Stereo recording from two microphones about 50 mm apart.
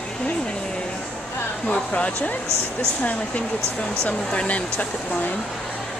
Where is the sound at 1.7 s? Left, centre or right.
Left.